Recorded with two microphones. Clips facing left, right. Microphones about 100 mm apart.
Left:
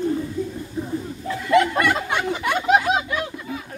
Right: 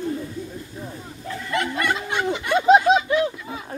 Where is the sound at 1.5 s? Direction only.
90° left.